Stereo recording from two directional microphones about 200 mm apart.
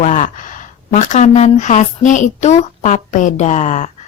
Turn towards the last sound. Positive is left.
turn(degrees=35)  # may be behind; listen again after turning